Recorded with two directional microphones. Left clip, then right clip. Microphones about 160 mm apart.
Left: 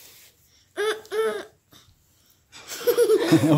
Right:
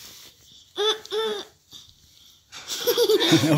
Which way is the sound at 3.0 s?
Centre (ahead or behind).